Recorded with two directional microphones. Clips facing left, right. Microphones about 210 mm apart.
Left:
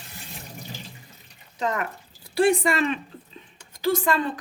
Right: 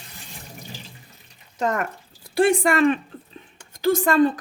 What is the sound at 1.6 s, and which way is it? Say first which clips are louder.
Speech: right 3 dB; 45° right (ahead or behind).